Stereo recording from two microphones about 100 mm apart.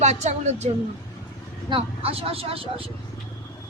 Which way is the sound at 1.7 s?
70° right (ahead or behind).